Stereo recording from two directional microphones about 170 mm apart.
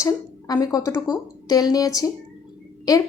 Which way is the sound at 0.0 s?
20° left (ahead or behind).